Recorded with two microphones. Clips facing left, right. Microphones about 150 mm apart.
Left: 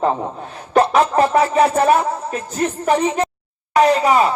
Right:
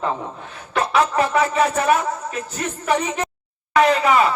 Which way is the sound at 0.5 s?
35° left (ahead or behind).